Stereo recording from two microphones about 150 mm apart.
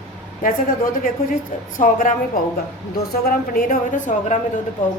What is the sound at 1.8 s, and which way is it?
Speech, 65° left (ahead or behind).